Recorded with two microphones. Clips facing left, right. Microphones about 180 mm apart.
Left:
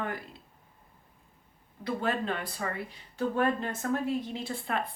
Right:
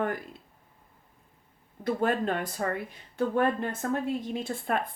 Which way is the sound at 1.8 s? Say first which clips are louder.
Right 4 dB; 45° right (ahead or behind).